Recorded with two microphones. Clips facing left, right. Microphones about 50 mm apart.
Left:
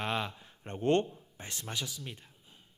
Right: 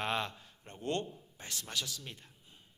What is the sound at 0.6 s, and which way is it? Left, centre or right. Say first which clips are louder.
Speech: left 8 dB; left.